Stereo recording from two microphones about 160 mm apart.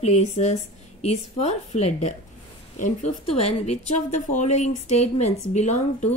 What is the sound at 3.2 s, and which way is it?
A woman's voice, 40° left (ahead or behind).